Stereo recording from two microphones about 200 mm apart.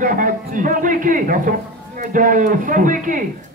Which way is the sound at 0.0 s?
40° right (ahead or behind).